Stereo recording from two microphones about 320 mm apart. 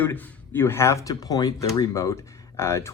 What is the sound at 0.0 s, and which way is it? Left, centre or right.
Speech, centre.